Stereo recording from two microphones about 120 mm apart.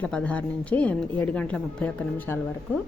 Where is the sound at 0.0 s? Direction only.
10° left (ahead or behind).